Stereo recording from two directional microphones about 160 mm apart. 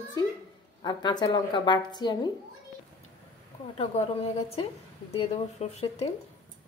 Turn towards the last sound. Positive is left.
turn(degrees=40)  # may be behind; listen again after turning